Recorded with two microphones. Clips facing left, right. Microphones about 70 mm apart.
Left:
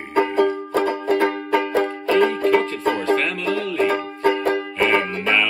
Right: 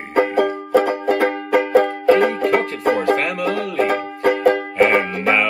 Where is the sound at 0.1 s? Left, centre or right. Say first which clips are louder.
Right 1 dB; right.